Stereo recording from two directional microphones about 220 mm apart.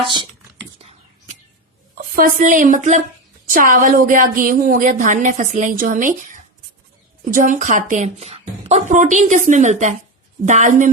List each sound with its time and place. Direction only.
0.0 s speech: 20° right (ahead or behind)
0.8 s whispering: 30° right (ahead or behind)
2.1 s a woman's voice: 40° right (ahead or behind)